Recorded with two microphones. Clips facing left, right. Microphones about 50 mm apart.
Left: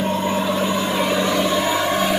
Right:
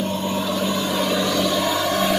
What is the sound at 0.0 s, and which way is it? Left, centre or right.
Vehicle, centre.